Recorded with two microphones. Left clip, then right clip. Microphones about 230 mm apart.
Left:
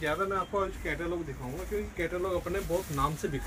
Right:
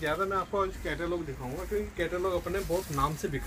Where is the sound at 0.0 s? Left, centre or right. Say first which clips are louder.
Right 1 dB; centre.